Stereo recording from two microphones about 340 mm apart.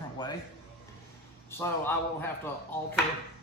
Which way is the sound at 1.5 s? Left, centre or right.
Centre.